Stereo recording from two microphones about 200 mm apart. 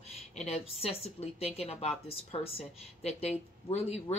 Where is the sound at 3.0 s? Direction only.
30° left (ahead or behind).